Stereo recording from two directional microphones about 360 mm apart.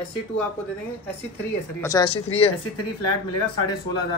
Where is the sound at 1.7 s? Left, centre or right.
Centre.